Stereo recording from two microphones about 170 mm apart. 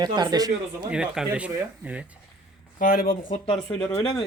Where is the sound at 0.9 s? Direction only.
5° right (ahead or behind).